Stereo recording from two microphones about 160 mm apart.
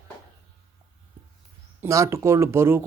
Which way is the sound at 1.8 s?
15° right (ahead or behind).